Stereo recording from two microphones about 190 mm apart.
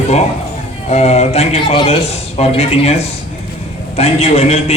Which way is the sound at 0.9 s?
35° left (ahead or behind).